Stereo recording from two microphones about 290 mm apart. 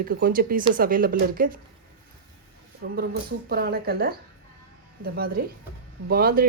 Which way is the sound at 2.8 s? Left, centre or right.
Right.